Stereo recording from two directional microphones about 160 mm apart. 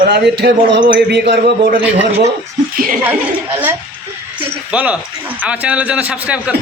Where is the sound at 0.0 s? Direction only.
90° right.